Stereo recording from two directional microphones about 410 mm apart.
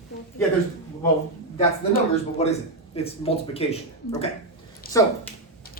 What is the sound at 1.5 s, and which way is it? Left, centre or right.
Speech, centre.